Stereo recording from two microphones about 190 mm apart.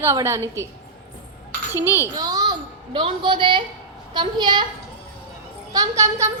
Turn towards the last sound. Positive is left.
turn(degrees=-15)  # may be behind; listen again after turning